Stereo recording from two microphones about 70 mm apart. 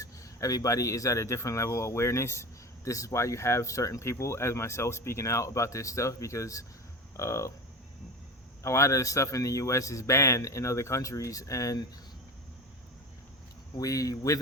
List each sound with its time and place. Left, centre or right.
0.0 s speech: left
8.6 s speech: left
13.7 s speech: left